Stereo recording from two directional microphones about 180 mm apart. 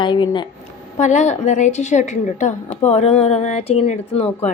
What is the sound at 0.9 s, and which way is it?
A woman's voice, 40° left (ahead or behind).